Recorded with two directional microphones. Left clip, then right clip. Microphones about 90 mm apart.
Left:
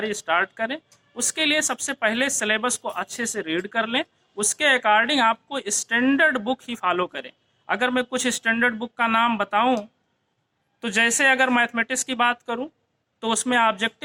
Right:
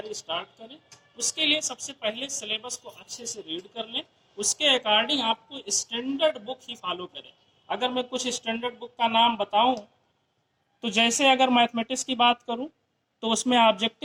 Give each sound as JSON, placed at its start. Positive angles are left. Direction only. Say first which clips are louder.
{"t": 0.1, "sound": "speech", "louder": "left 9 dB", "side_deg": 25}
{"t": 10.8, "sound": "speech", "louder": "left 3 dB", "side_deg": 30}